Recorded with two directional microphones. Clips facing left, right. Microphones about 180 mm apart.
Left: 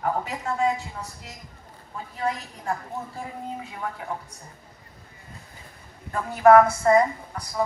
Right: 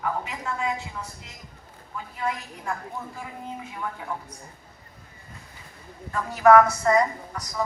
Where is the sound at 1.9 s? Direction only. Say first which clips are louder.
Left 2 dB; 35° left (ahead or behind).